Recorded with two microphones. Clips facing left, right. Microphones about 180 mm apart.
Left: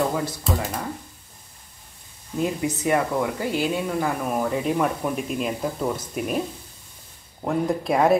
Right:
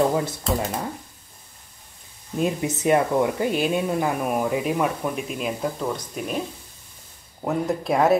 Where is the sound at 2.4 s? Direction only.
20° right (ahead or behind).